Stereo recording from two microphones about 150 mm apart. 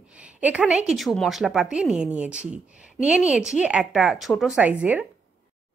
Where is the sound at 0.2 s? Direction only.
10° right (ahead or behind).